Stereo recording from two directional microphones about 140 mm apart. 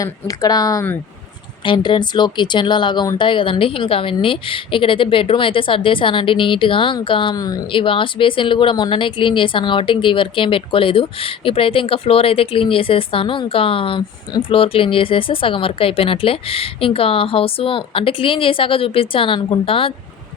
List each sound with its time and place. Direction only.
0.0 s a woman's voice: 25° left (ahead or behind)